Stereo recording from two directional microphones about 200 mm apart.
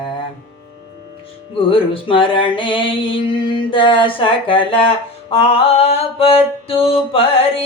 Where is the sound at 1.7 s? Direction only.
25° left (ahead or behind).